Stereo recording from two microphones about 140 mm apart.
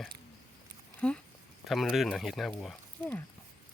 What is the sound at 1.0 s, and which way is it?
Speech, 10° left (ahead or behind).